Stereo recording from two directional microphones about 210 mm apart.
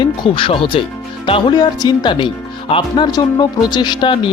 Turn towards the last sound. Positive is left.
turn(degrees=20)  # may be behind; listen again after turning